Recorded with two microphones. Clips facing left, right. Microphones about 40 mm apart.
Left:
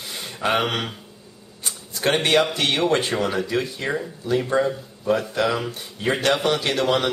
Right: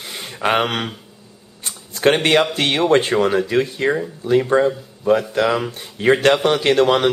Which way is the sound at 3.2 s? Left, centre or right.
Right.